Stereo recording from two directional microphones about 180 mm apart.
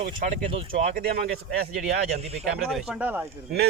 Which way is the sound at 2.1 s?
35° right (ahead or behind).